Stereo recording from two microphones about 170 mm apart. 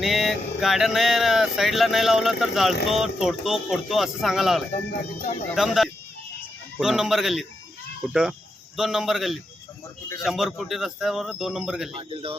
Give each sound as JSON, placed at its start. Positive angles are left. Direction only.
{"t": 0.0, "sound": "speech", "side_deg": 0}
{"t": 11.9, "sound": "speech", "side_deg": -30}